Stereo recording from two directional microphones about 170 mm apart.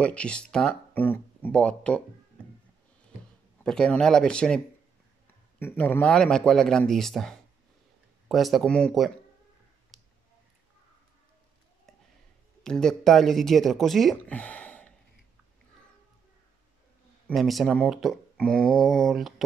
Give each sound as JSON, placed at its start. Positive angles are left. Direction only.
{"t": 0.0, "sound": "speech", "side_deg": 5}
{"t": 3.6, "sound": "speech", "side_deg": 5}
{"t": 5.6, "sound": "speech", "side_deg": 10}
{"t": 9.9, "sound": "a sound", "side_deg": 0}
{"t": 12.6, "sound": "speech", "side_deg": 5}
{"t": 17.3, "sound": "speech", "side_deg": 0}